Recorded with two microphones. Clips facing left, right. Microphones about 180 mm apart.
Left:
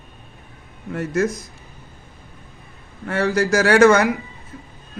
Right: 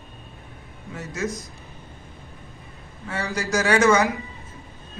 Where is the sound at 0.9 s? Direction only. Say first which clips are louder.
Left 8 dB; 55° left (ahead or behind).